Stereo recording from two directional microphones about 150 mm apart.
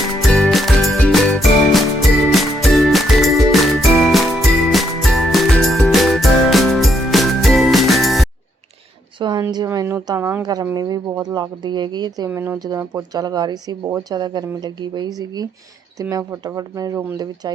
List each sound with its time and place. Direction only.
0.2 s music: 5° left (ahead or behind)
9.1 s a sound: 30° right (ahead or behind)
9.6 s a sound: 15° right (ahead or behind)
10.4 s speech: 25° right (ahead or behind)
12.3 s speech: 15° right (ahead or behind)
12.5 s speech: 25° right (ahead or behind)